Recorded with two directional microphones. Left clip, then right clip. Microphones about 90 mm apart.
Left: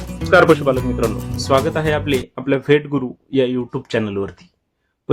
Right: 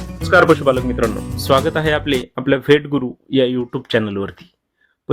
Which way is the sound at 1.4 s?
40° right (ahead or behind).